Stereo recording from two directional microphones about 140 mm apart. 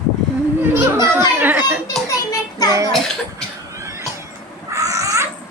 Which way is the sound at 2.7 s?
25° right (ahead or behind).